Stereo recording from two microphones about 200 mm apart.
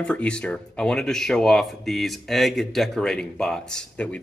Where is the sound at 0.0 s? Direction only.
5° left (ahead or behind).